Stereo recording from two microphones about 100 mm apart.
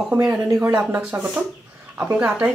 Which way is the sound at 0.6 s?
25° right (ahead or behind).